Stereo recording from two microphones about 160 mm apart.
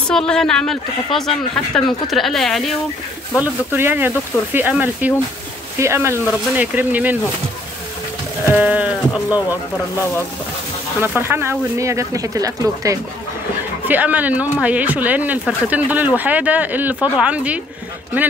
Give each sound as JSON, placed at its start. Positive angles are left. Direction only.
{"t": 0.1, "sound": "speech", "side_deg": 5}
{"t": 3.3, "sound": "speech", "side_deg": -10}
{"t": 8.5, "sound": "speech", "side_deg": -10}
{"t": 11.0, "sound": "speech", "side_deg": -15}
{"t": 13.8, "sound": "speech", "side_deg": -10}